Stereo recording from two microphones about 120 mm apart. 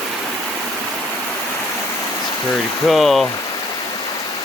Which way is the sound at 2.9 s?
Centre (ahead or behind).